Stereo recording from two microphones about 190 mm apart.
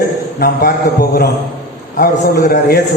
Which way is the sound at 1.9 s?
50° left (ahead or behind).